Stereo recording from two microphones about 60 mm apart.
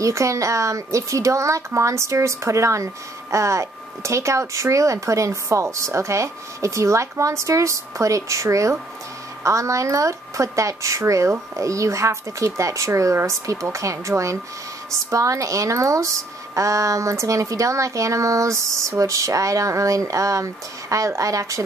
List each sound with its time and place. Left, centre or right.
0.0 s speech: right